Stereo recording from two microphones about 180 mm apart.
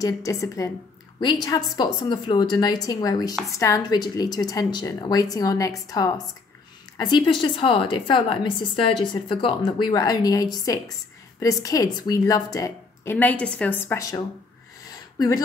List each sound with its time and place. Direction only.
0.0 s a woman's voice: 20° left (ahead or behind)
7.4 s a woman's voice: 30° left (ahead or behind)
14.9 s a sound: 20° left (ahead or behind)